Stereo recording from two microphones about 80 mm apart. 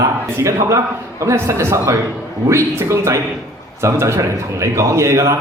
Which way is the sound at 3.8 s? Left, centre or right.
Right.